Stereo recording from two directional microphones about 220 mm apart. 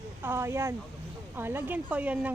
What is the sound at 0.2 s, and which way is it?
A woman's voice, 10° right (ahead or behind).